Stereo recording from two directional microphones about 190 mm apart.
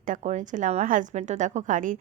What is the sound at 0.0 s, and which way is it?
A woman's voice, 40° right (ahead or behind).